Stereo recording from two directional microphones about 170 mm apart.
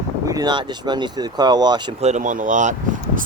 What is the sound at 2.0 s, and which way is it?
Speech, 45° right (ahead or behind).